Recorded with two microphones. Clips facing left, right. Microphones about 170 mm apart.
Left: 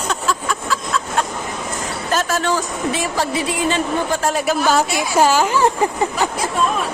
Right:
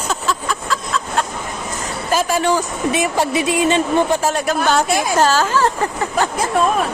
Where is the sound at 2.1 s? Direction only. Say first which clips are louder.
Right 3 dB; 10° right (ahead or behind).